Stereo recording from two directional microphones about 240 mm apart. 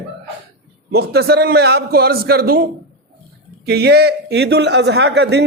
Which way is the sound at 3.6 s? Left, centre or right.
Right.